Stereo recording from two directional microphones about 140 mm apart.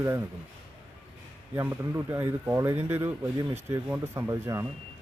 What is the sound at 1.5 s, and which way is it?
Speech, 20° right (ahead or behind).